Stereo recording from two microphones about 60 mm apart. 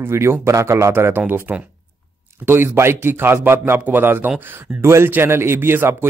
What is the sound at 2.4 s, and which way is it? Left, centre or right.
Speech, right.